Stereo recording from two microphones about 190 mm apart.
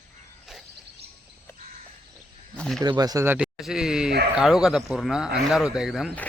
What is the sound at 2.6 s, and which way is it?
Speech, centre (ahead or behind).